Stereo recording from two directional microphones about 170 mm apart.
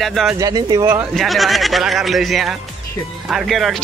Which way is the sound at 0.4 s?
20° right (ahead or behind).